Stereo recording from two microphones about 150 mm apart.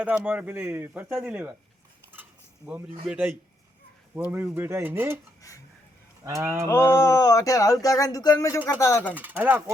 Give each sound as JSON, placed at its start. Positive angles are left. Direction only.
{"t": 0.0, "sound": "a man's voice", "side_deg": -10}
{"t": 2.6, "sound": "a man's voice", "side_deg": -10}
{"t": 5.4, "sound": "a sound", "side_deg": 20}
{"t": 6.2, "sound": "a man's voice", "side_deg": -20}
{"t": 6.7, "sound": "speech", "side_deg": 15}
{"t": 9.1, "sound": "a man's voice", "side_deg": -10}